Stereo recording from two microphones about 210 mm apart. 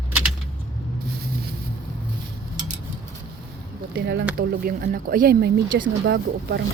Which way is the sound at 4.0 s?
55° right (ahead or behind).